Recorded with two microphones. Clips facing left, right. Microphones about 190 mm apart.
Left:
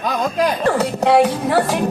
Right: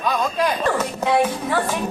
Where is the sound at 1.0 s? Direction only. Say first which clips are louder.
Left 5 dB; 70° left (ahead or behind).